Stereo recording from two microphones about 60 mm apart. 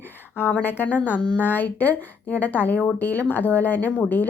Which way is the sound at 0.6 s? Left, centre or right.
Left.